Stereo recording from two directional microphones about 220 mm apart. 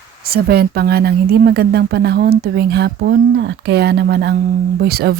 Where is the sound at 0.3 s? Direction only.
45° right (ahead or behind).